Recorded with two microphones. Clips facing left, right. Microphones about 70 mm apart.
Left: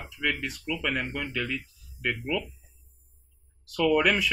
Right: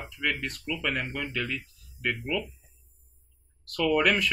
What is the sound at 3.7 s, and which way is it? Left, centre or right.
Speech, centre.